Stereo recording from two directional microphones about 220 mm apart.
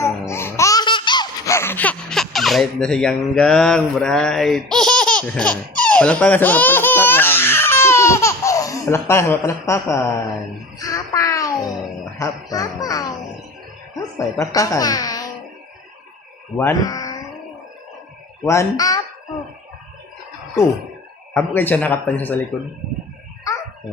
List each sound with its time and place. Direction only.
0.0 s laughter: 10° left (ahead or behind)
10.8 s a sound: 15° left (ahead or behind)
12.2 s a man's voice: 15° left (ahead or behind)
14.3 s a man's voice: 15° left (ahead or behind)
16.6 s speech: 15° left (ahead or behind)
18.4 s a man's voice: 15° left (ahead or behind)
21.3 s a man's voice: 10° left (ahead or behind)